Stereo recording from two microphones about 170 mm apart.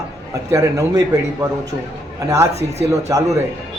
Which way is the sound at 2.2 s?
20° right (ahead or behind).